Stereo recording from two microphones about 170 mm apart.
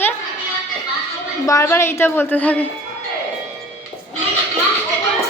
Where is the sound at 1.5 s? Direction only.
15° left (ahead or behind).